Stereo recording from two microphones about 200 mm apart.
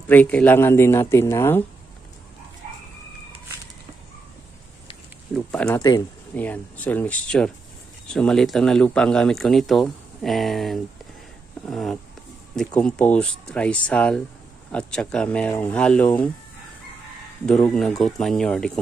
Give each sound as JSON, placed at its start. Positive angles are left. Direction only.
{"t": 0.1, "sound": "speech", "side_deg": 10}
{"t": 5.3, "sound": "speech", "side_deg": 5}
{"t": 5.8, "sound": "speech", "side_deg": 20}
{"t": 6.3, "sound": "speech", "side_deg": 10}
{"t": 17.5, "sound": "speech", "side_deg": 0}